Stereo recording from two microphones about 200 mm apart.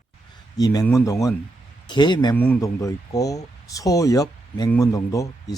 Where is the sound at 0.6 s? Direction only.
20° left (ahead or behind).